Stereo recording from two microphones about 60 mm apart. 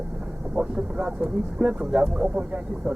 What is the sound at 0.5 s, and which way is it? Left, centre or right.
Speech, centre.